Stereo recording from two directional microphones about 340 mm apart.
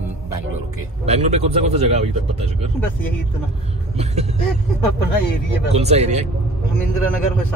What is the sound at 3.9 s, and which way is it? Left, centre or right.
Speech, centre.